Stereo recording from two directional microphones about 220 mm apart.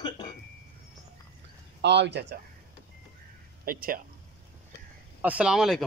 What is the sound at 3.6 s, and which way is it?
Speech, 40° right (ahead or behind).